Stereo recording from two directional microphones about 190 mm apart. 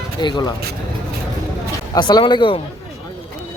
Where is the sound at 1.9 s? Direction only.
20° left (ahead or behind).